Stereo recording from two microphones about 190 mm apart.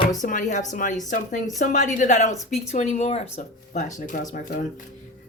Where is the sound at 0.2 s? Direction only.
40° left (ahead or behind).